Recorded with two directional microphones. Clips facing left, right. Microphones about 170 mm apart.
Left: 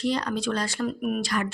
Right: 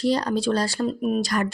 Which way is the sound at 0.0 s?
35° right (ahead or behind).